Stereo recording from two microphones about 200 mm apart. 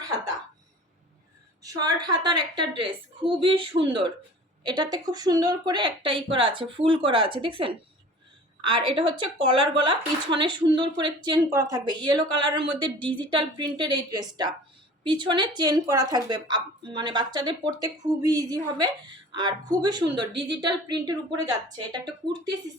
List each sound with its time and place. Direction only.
1.6 s a woman's voice: 20° right (ahead or behind)